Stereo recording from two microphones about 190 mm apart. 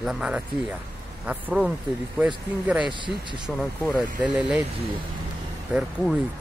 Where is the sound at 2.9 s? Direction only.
25° right (ahead or behind).